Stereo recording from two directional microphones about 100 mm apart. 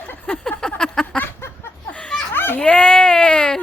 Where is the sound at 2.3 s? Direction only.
20° left (ahead or behind).